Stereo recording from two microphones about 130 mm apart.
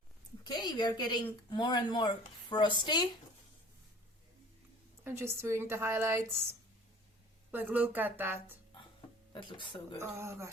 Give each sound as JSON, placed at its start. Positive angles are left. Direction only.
{"t": 0.4, "sound": "speech", "side_deg": 35}
{"t": 5.0, "sound": "speech", "side_deg": -20}
{"t": 9.3, "sound": "speech", "side_deg": 40}
{"t": 10.0, "sound": "speech", "side_deg": -20}